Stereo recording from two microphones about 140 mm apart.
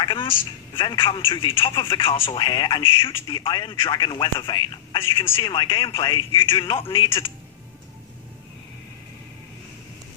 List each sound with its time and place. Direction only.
0.0 s speech: 35° left (ahead or behind)